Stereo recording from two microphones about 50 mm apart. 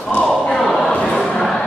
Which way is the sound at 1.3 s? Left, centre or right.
Centre.